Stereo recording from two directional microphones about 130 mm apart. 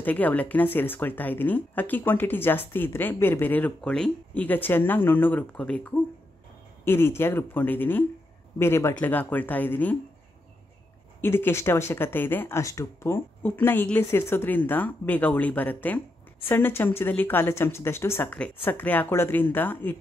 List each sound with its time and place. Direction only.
0.0 s speech: 15° left (ahead or behind)
11.1 s speech: 15° left (ahead or behind)